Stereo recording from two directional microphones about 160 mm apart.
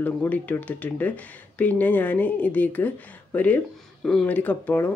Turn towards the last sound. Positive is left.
turn(degrees=10)  # may be behind; listen again after turning